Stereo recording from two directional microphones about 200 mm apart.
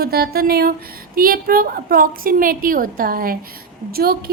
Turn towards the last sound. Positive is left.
turn(degrees=-50)  # may be behind; listen again after turning